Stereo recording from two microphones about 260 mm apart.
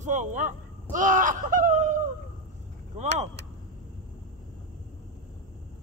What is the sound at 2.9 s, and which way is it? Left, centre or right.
Speech, right.